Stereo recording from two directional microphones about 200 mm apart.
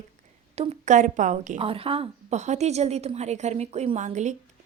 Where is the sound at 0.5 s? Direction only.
30° right (ahead or behind).